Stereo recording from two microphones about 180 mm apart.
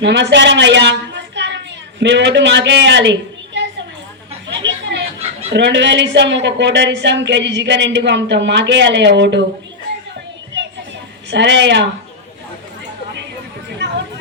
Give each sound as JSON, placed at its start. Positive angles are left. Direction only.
{"t": 0.0, "sound": "a woman's voice", "side_deg": -75}
{"t": 4.4, "sound": "chatter", "side_deg": -80}
{"t": 5.5, "sound": "speech", "side_deg": -75}
{"t": 11.3, "sound": "speech", "side_deg": -75}